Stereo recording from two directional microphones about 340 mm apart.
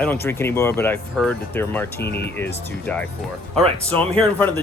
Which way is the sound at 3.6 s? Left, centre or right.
Centre.